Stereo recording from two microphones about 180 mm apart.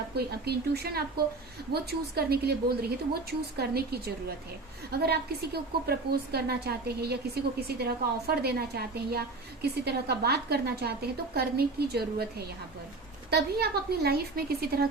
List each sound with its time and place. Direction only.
0.2 s a woman's voice: 60° right (ahead or behind)